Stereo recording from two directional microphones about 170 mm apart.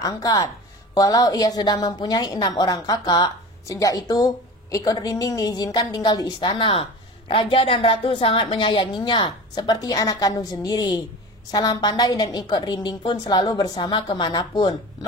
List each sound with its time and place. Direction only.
0.0 s a woman's voice: 20° left (ahead or behind)